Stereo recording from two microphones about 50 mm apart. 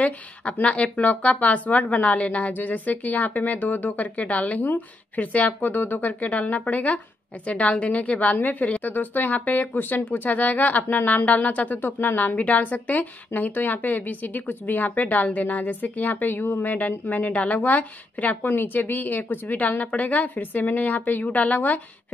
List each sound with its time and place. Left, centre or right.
0.0 s speech: left
2.5 s a woman's voice: left
6.3 s a woman's voice: left